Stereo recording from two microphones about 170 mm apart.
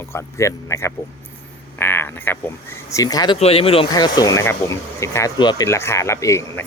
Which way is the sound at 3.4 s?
35° left (ahead or behind).